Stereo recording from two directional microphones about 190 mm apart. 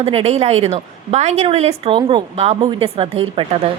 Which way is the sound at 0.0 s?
35° right (ahead or behind).